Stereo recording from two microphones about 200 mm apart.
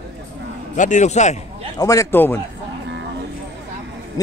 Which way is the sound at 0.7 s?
40° left (ahead or behind).